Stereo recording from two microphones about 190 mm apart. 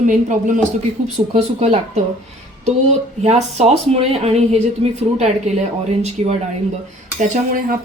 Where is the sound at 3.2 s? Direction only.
35° right (ahead or behind).